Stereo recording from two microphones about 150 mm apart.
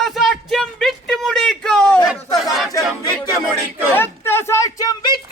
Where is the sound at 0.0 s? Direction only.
Centre (ahead or behind).